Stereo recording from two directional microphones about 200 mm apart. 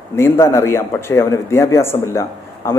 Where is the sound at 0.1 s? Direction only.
15° left (ahead or behind).